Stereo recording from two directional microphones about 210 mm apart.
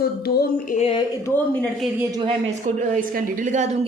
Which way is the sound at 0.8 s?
25° left (ahead or behind).